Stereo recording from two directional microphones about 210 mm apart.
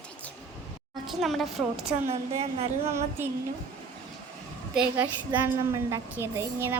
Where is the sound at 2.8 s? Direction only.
10° right (ahead or behind).